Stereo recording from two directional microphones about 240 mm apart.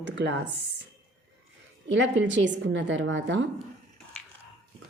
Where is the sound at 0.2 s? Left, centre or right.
Right.